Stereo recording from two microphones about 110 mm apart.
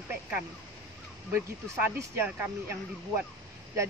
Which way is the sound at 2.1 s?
20° right (ahead or behind).